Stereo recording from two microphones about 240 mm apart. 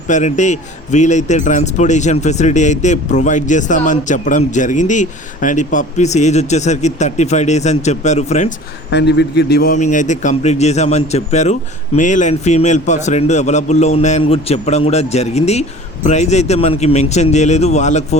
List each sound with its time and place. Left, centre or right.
0.1 s a man's voice: left
8.9 s a man's voice: left